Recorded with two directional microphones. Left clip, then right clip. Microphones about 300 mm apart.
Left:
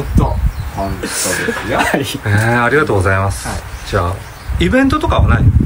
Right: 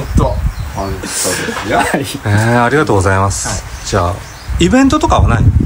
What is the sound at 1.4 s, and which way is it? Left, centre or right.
Speech, centre.